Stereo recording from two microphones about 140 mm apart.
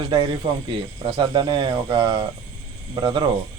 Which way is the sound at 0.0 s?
35° right (ahead or behind).